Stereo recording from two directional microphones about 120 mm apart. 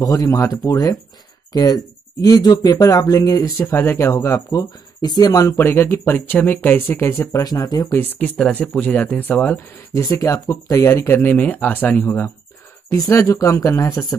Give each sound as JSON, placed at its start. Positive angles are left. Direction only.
{"t": 0.0, "sound": "speech", "side_deg": 30}
{"t": 3.5, "sound": "speech", "side_deg": 15}
{"t": 5.5, "sound": "speech", "side_deg": 20}
{"t": 7.3, "sound": "speech", "side_deg": 30}
{"t": 7.9, "sound": "speech", "side_deg": 15}
{"t": 10.0, "sound": "speech", "side_deg": 30}
{"t": 12.9, "sound": "speech", "side_deg": 30}